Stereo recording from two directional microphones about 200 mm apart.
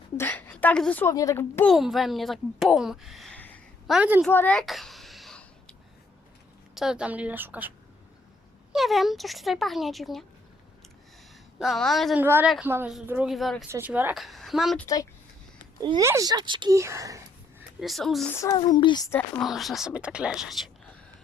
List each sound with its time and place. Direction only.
0.2 s a woman's voice: 10° left (ahead or behind)
1.7 s speech: centre (ahead or behind)
3.9 s speech: 5° right (ahead or behind)
4.3 s a sound: 10° left (ahead or behind)
6.7 s a woman's voice: 5° right (ahead or behind)
8.7 s speech: centre (ahead or behind)
11.6 s speech: centre (ahead or behind)
12.2 s a woman's voice: 10° right (ahead or behind)
13.7 s speech: 10° right (ahead or behind)
15.8 s a woman's voice: 20° right (ahead or behind)
17.7 s speech: centre (ahead or behind)
18.3 s a child's voice: 20° left (ahead or behind)
19.4 s speech: centre (ahead or behind)